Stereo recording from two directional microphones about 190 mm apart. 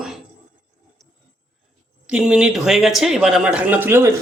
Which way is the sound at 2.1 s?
5° right (ahead or behind).